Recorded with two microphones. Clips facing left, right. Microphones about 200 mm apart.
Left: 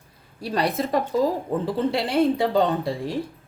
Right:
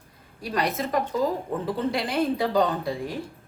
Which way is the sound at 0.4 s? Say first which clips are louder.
Left 3 dB; 30° left (ahead or behind).